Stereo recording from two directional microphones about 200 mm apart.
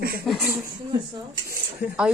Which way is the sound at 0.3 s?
Centre (ahead or behind).